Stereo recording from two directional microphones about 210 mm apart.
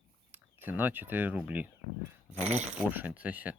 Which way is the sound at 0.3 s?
10° right (ahead or behind).